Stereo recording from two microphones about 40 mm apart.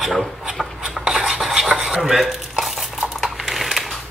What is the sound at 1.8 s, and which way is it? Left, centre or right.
Stir, centre.